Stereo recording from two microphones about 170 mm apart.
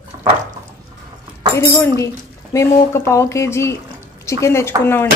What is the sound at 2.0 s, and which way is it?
Speech, 20° left (ahead or behind).